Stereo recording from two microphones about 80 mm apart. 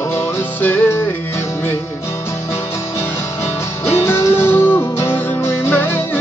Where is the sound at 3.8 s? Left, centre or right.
Left.